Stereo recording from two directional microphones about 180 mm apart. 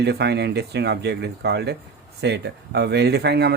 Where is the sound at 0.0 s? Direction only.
65° right (ahead or behind).